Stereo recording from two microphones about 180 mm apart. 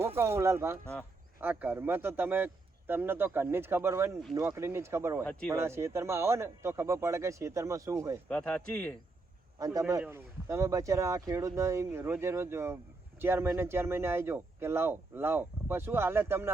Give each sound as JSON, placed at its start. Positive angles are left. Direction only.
{"t": 0.0, "sound": "speech", "side_deg": -15}
{"t": 5.2, "sound": "speech", "side_deg": 5}
{"t": 5.5, "sound": "speech", "side_deg": -15}
{"t": 8.3, "sound": "speech", "side_deg": 5}
{"t": 9.6, "sound": "speech", "side_deg": -20}